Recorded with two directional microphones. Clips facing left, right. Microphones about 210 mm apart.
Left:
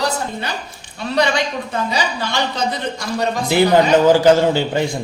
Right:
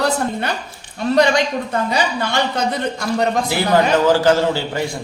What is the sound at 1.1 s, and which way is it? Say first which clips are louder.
A woman's voice: right 3 dB; 45° right (ahead or behind).